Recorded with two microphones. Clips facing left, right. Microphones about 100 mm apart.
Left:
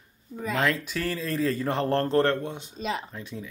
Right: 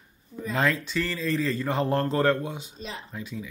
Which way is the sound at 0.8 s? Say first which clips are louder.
Right 1 dB; 5° left (ahead or behind).